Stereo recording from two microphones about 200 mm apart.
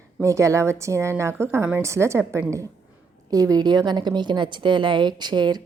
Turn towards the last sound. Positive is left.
turn(degrees=-20)  # may be behind; listen again after turning